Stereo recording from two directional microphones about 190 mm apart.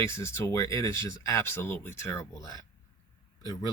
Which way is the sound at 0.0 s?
15° left (ahead or behind).